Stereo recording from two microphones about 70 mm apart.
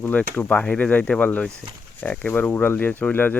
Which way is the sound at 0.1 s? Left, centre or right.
Left.